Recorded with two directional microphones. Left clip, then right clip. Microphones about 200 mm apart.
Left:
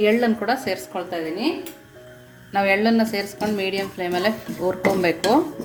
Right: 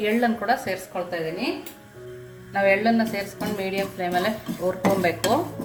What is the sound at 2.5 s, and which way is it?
A woman's voice, 50° left (ahead or behind).